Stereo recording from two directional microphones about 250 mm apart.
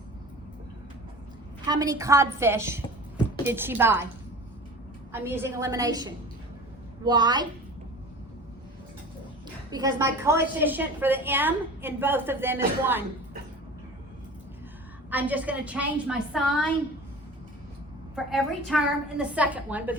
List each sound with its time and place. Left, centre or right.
1.6 s a woman's voice: centre
5.1 s a woman's voice: centre
9.7 s a woman's voice: centre
15.1 s a woman's voice: centre
18.1 s a woman's voice: centre